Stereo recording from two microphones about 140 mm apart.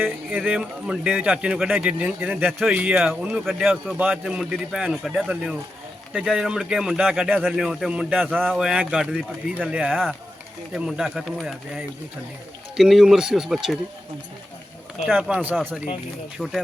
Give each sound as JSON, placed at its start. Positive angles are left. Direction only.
{"t": 0.0, "sound": "speech", "side_deg": -10}
{"t": 15.0, "sound": "speech", "side_deg": -5}